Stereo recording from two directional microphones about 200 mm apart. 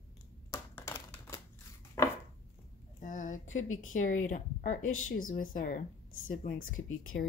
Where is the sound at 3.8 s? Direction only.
40° left (ahead or behind).